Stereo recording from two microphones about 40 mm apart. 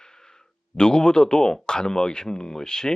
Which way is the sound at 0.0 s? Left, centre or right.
Centre.